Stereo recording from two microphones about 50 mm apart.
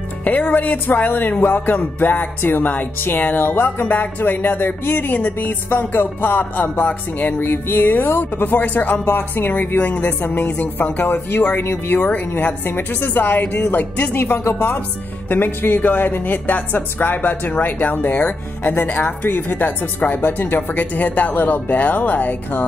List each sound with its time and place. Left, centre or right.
0.2 s speech: left